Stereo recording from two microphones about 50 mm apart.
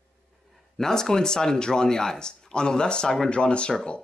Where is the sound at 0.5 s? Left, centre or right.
Centre.